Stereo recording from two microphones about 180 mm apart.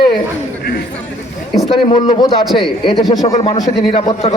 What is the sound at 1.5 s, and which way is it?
Speech, 25° left (ahead or behind).